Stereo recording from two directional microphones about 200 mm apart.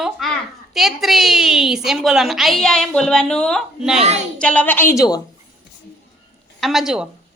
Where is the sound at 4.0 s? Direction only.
30° right (ahead or behind).